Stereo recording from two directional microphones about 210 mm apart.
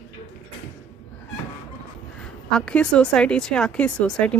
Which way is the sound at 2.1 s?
5° left (ahead or behind).